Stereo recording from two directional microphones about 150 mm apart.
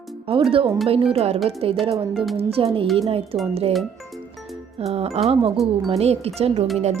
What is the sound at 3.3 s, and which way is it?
Music, 35° right (ahead or behind).